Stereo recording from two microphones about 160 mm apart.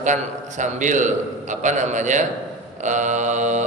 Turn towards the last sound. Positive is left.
turn(degrees=-50)  # may be behind; listen again after turning